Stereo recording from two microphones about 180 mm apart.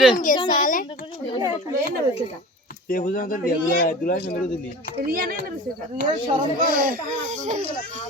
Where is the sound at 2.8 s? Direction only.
50° left (ahead or behind).